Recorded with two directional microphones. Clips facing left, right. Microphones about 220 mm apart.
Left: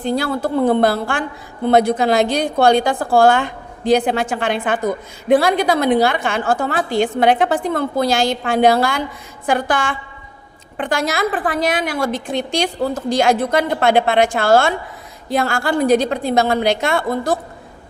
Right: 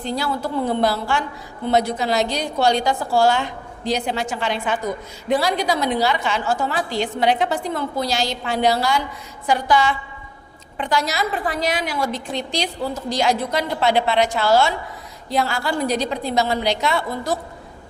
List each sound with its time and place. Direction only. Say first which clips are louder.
0.0 s a woman's voice: left 5 dB; 55° left (ahead or behind)